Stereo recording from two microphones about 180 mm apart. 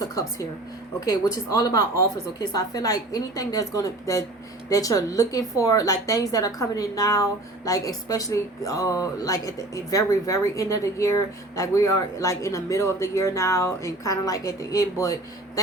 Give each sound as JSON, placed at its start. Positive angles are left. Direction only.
{"t": 0.0, "sound": "a woman's voice", "side_deg": 20}